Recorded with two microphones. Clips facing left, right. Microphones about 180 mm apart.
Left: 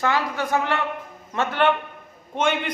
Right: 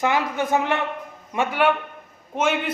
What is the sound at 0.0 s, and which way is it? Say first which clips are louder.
A man's voice: right 1 dB; 15° right (ahead or behind).